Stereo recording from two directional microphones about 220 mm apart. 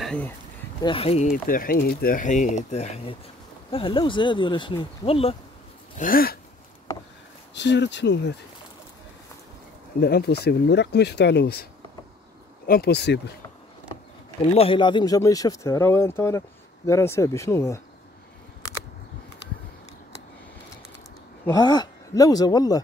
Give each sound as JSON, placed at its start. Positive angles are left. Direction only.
{"t": 0.0, "sound": "a sound", "side_deg": 5}
{"t": 0.8, "sound": "speech", "side_deg": 25}
{"t": 5.9, "sound": "speech", "side_deg": 40}
{"t": 7.5, "sound": "speech", "side_deg": 50}
{"t": 9.9, "sound": "speech", "side_deg": 45}
{"t": 12.6, "sound": "speech", "side_deg": 45}
{"t": 14.5, "sound": "speech", "side_deg": 25}
{"t": 21.5, "sound": "speech", "side_deg": 15}